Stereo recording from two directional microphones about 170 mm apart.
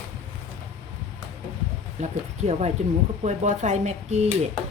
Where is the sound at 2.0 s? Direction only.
40° right (ahead or behind).